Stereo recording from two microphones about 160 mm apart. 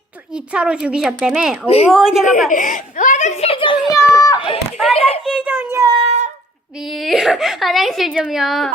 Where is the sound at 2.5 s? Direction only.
55° left (ahead or behind); by 3.8 s 35° left (ahead or behind).